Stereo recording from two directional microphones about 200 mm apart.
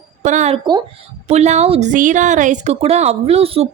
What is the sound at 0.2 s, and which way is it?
A woman's voice, 35° right (ahead or behind).